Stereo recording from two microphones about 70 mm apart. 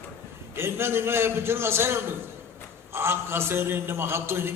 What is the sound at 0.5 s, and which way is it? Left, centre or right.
A man's voice, right.